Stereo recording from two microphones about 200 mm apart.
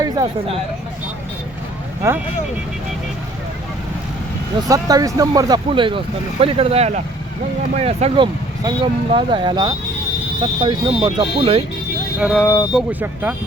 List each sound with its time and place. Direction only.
0.0 s speech: 20° right (ahead or behind)
2.0 s speech: 15° right (ahead or behind)
4.7 s speech: 15° right (ahead or behind)
12.2 s speech: centre (ahead or behind)